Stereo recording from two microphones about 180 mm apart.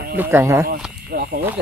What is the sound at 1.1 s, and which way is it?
Speech, 55° right (ahead or behind).